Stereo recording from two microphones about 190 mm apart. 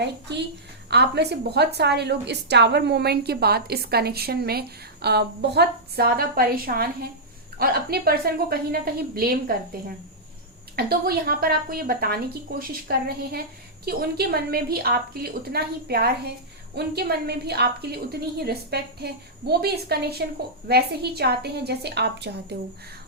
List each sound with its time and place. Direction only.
0.0 s a woman's voice: 60° right (ahead or behind)
10.8 s a woman's voice: 55° right (ahead or behind)